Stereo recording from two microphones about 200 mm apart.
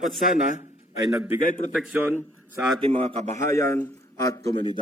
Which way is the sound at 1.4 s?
40° left (ahead or behind).